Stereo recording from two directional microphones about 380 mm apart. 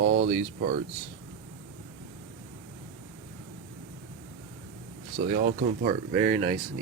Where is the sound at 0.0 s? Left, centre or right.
Right.